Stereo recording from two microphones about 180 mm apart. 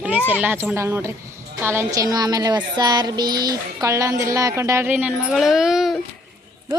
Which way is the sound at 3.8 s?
15° right (ahead or behind).